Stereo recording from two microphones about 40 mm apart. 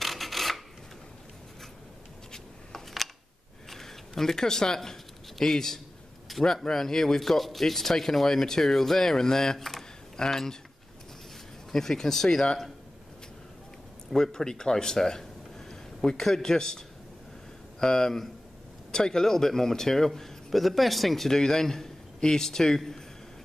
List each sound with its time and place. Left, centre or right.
0.0 s filing: centre
2.3 s a sound: centre
3.7 s speech: centre
11.7 s speech: centre
14.1 s a man's voice: centre
21.3 s speech: centre